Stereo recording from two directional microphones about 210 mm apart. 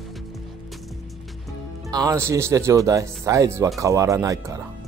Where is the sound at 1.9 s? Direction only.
15° right (ahead or behind).